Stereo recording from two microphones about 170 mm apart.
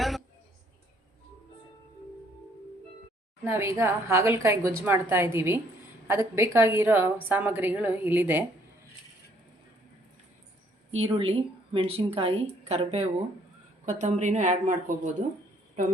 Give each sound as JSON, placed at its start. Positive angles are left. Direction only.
{"t": 3.4, "sound": "a woman's voice", "side_deg": -15}
{"t": 11.0, "sound": "a woman's voice", "side_deg": -35}